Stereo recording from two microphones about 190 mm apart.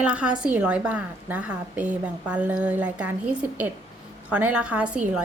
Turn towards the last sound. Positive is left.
turn(degrees=-5)  # may be behind; listen again after turning